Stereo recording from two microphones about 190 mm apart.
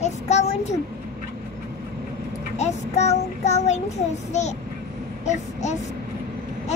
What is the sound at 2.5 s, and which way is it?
Child singing, 35° left (ahead or behind).